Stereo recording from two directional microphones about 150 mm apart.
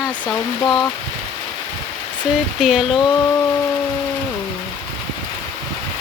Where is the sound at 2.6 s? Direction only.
Centre (ahead or behind).